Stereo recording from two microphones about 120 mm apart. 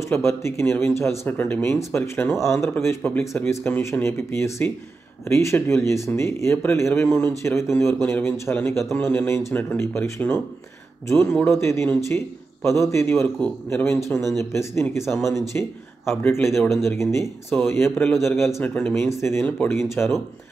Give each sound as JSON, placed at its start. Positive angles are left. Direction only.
{"t": 0.0, "sound": "speech", "side_deg": 20}
{"t": 11.2, "sound": "speech", "side_deg": 10}
{"t": 18.1, "sound": "a man's voice", "side_deg": 0}
{"t": 18.6, "sound": "speech", "side_deg": 10}